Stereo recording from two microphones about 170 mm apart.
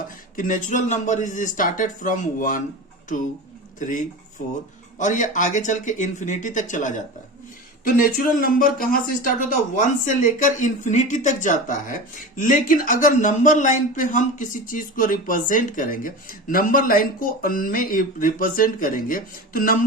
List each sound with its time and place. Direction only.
0.3 s speech: 50° left (ahead or behind)
3.8 s speech: 50° left (ahead or behind)